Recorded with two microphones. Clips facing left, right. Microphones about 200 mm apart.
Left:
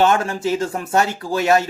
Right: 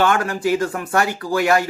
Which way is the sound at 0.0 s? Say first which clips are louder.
Left 1 dB; 25° left (ahead or behind).